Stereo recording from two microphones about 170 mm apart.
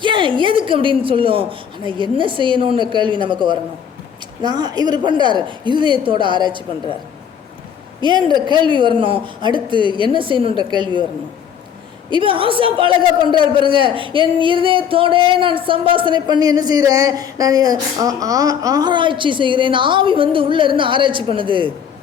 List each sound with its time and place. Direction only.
0.0 s a man's voice: 30° right (ahead or behind)
8.0 s a man's voice: 25° right (ahead or behind)
12.1 s a man's voice: 30° right (ahead or behind)